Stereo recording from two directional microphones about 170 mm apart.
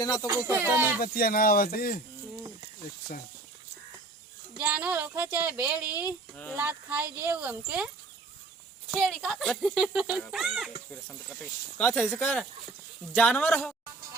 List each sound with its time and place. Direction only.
0.0 s speech: 20° left (ahead or behind)
0.3 s a child's voice: 15° right (ahead or behind)
0.9 s speech: 60° left (ahead or behind)
4.5 s a child's voice: 10° right (ahead or behind)
6.3 s speech: 10° left (ahead or behind)
6.6 s a child's voice: 10° right (ahead or behind)
8.9 s speech: centre (ahead or behind)
11.8 s speech: 10° left (ahead or behind)